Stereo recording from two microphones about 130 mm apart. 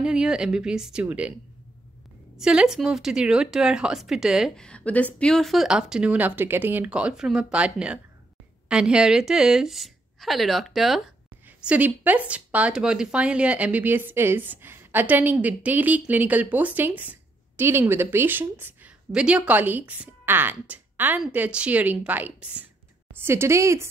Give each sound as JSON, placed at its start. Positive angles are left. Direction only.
{"t": 0.0, "sound": "a woman's voice", "side_deg": -5}
{"t": 2.3, "sound": "a woman's voice", "side_deg": -5}
{"t": 4.6, "sound": "a woman's voice", "side_deg": 10}
{"t": 11.6, "sound": "a woman's voice", "side_deg": -10}